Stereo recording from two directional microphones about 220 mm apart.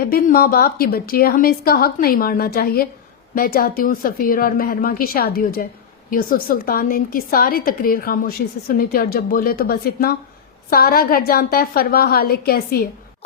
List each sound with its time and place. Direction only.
0.0 s a woman's voice: 40° left (ahead or behind)